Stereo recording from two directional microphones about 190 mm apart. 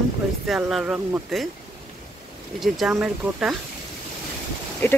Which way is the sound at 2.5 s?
Centre (ahead or behind).